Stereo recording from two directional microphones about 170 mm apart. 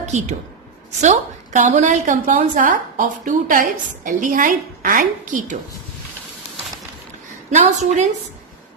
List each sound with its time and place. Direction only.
0.0 s a woman's voice: 45° right (ahead or behind)
7.5 s a woman's voice: 45° right (ahead or behind)